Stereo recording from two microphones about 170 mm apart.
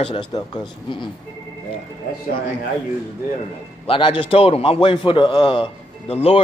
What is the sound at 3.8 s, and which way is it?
A man's voice, 30° left (ahead or behind).